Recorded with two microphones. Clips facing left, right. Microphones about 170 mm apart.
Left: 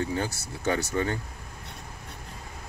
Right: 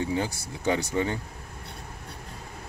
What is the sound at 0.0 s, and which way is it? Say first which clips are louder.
Speech: right 1 dB; 15° right (ahead or behind).